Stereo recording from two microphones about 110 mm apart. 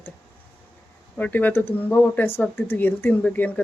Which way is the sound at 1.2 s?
15° left (ahead or behind).